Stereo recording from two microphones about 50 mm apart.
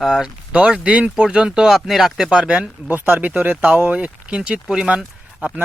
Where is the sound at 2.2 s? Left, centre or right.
Centre.